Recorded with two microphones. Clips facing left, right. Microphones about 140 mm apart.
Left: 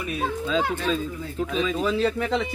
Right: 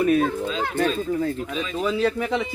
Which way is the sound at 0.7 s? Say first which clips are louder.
Right 5 dB; 50° right (ahead or behind).